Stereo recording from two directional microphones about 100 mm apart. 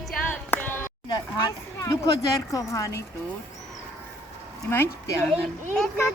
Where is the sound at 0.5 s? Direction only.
20° left (ahead or behind).